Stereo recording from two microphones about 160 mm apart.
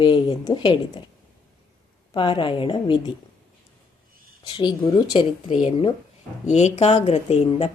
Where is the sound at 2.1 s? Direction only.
30° left (ahead or behind).